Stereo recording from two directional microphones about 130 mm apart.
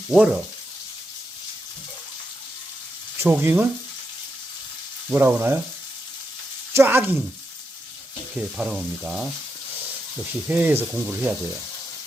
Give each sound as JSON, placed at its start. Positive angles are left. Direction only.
{"t": 0.1, "sound": "speech", "side_deg": -5}
{"t": 3.2, "sound": "speech", "side_deg": -15}
{"t": 5.1, "sound": "speech", "side_deg": -15}
{"t": 6.7, "sound": "speech", "side_deg": -15}
{"t": 8.4, "sound": "speech", "side_deg": -5}
{"t": 10.5, "sound": "speech", "side_deg": -15}